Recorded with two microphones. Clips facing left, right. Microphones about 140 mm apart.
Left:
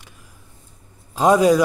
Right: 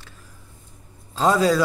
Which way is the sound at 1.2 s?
20° left (ahead or behind).